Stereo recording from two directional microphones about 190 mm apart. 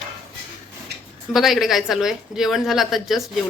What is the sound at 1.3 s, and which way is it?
Speech, centre (ahead or behind).